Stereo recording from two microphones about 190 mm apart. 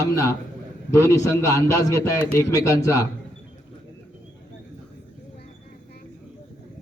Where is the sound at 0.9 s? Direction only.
15° left (ahead or behind).